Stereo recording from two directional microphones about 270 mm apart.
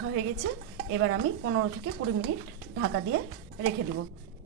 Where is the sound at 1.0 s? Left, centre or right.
Right.